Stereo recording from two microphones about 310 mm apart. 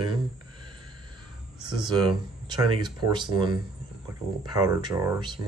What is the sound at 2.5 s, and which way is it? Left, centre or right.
Speech, centre.